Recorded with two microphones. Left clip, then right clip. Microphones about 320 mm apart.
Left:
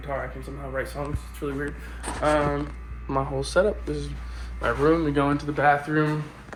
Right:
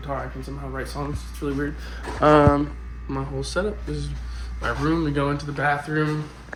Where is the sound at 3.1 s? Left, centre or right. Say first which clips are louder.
Left 3 dB; centre.